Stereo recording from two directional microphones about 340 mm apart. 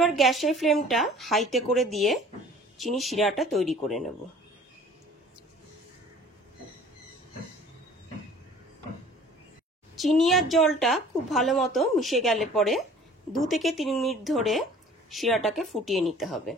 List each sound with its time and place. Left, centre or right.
0.0 s speech: centre
9.9 s speech: centre